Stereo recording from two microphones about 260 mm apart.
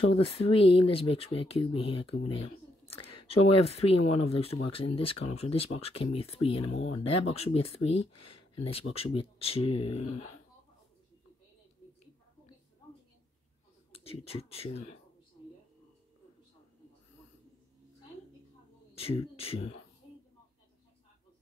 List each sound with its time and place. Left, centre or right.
0.0 s speech: left
13.9 s speech: left
18.9 s speech: left